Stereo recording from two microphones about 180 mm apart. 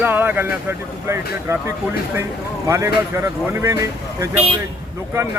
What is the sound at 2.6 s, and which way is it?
Speech, 15° right (ahead or behind).